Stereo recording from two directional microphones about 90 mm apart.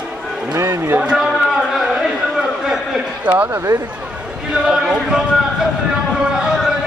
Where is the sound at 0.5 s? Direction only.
30° right (ahead or behind).